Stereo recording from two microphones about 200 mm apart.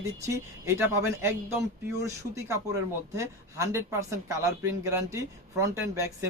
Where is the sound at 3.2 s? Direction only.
15° right (ahead or behind).